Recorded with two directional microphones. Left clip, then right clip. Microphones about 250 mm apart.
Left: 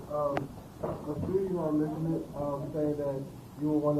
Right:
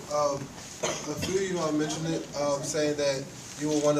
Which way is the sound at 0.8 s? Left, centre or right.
Right.